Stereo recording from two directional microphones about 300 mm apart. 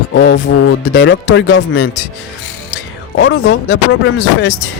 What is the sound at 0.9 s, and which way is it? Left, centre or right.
Speech, left.